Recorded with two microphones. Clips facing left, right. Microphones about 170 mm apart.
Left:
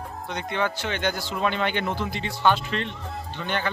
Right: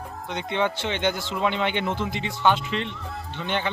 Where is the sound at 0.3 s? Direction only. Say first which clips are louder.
Right 2 dB; 20° right (ahead or behind).